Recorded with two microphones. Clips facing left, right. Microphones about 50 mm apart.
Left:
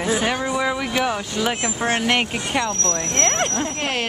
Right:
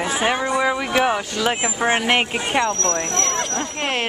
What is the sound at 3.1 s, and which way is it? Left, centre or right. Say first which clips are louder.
Speech: left 2 dB; left.